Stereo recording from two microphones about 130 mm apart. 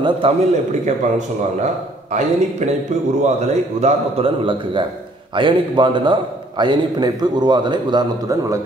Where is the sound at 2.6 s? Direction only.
60° right (ahead or behind).